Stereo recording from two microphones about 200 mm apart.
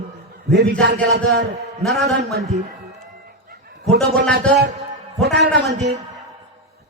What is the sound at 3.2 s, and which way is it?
Dog, 55° right (ahead or behind).